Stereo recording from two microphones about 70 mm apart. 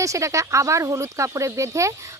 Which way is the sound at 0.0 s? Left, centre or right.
Right.